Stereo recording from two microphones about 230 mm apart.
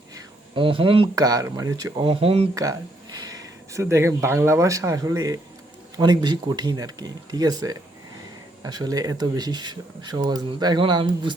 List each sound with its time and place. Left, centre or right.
0.1 s speech: right